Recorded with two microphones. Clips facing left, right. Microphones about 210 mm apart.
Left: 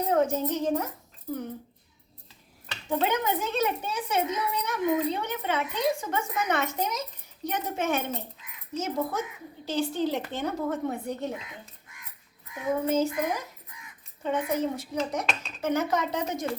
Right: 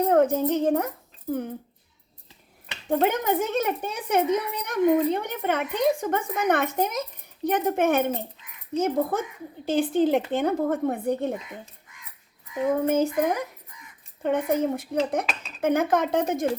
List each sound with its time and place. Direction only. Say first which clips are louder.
0.1 s a child's voice: right 2 dB; 55° right (ahead or behind)
2.9 s a child's voice: right 4 dB; 50° right (ahead or behind)
12.8 s speech: right 2 dB; 55° right (ahead or behind)
15.3 s speech: left 1 dB; 5° right (ahead or behind)
15.6 s a child's voice: right 5 dB; 55° right (ahead or behind)